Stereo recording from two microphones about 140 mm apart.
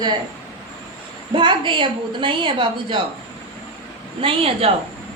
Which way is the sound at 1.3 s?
35° right (ahead or behind).